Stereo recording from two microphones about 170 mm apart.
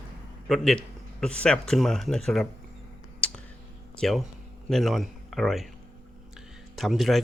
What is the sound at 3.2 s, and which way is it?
Clicking, 5° left (ahead or behind).